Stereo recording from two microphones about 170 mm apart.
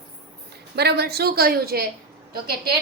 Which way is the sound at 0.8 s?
70° right (ahead or behind).